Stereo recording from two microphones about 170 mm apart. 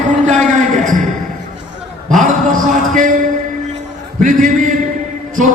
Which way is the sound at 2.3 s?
55° right (ahead or behind).